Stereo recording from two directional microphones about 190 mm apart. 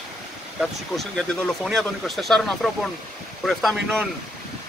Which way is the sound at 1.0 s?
Centre (ahead or behind).